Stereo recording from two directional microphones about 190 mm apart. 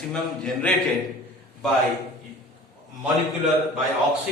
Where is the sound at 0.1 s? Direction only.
5° left (ahead or behind).